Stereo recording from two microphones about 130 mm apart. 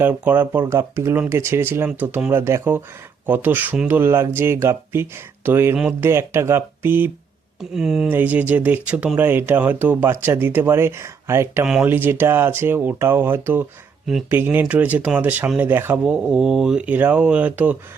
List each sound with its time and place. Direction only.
0.0 s speech: 15° right (ahead or behind)
6.1 s speech: 20° right (ahead or behind)
7.6 s speech: 5° right (ahead or behind); by 11.6 s 20° right (ahead or behind)
11.6 s speech: 5° right (ahead or behind)